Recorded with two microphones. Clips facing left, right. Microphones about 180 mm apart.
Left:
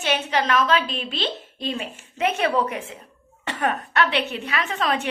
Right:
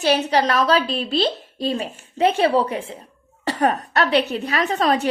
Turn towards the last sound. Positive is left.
turn(degrees=-40)  # may be behind; listen again after turning